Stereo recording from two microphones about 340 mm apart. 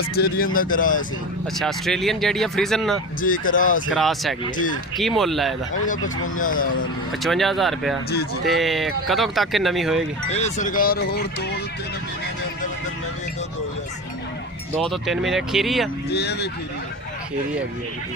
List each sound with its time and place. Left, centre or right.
0.2 s speech: left
1.5 s speech: centre
3.2 s speech: left
3.9 s speech: centre
4.5 s speech: left
4.9 s speech: centre
6.3 s speech: left
7.1 s speech: centre
10.3 s speech: left
14.8 s speech: centre
16.0 s speech: left